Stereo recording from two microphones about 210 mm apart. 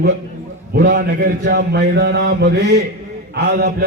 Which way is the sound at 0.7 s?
45° right (ahead or behind).